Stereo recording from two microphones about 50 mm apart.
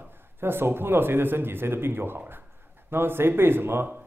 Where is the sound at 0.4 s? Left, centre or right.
Right.